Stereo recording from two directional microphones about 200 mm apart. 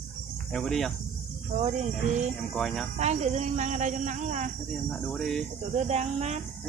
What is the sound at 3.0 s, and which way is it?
A woman's voice, 35° right (ahead or behind).